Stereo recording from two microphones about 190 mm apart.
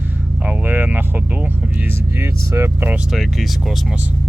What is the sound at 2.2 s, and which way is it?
Speech, 15° right (ahead or behind).